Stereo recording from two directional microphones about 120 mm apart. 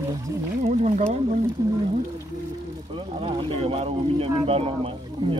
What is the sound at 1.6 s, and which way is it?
Speech, 35° right (ahead or behind).